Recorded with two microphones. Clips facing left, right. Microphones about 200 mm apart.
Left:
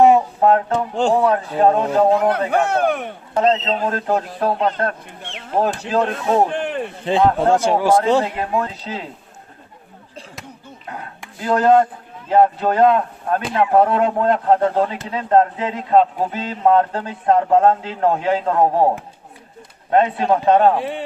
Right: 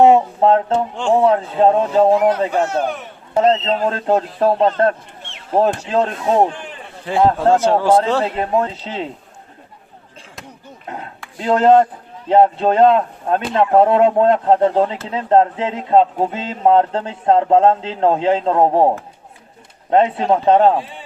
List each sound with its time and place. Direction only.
0.0 s speech: 25° right (ahead or behind)
2.5 s speech: 60° left (ahead or behind)
3.4 s speech: 25° right (ahead or behind)
6.5 s a sound: 65° left (ahead or behind)
7.0 s a man's voice: 20° left (ahead or behind)
8.4 s speech: 25° right (ahead or behind)
11.3 s speech: 25° right (ahead or behind)
19.9 s speech: 25° right (ahead or behind)
20.7 s speech: 65° left (ahead or behind)